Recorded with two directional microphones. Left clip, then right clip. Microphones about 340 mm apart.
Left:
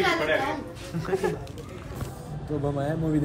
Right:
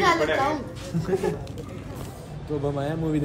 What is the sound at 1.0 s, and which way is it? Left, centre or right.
Speech, centre.